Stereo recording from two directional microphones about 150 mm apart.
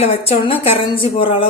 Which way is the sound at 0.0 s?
40° left (ahead or behind).